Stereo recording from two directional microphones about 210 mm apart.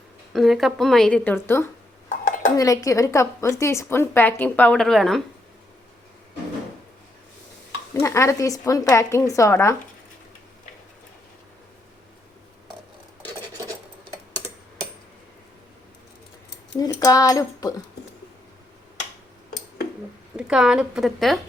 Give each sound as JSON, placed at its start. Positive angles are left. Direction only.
{"t": 0.3, "sound": "a woman's voice", "side_deg": 0}
{"t": 8.0, "sound": "a woman's voice", "side_deg": 15}
{"t": 16.7, "sound": "speech", "side_deg": 15}
{"t": 20.3, "sound": "a woman's voice", "side_deg": -5}